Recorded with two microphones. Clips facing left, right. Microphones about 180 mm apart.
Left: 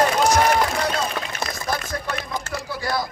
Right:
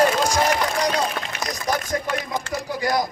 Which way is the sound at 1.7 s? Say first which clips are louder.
Right 3 dB; 15° right (ahead or behind).